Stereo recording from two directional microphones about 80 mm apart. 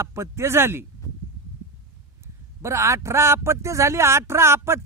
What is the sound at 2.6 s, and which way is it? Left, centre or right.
Speech, right.